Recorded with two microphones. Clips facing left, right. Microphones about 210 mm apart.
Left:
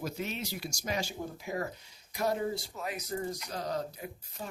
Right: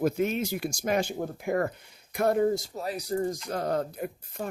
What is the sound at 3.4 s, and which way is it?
Speech, 55° right (ahead or behind).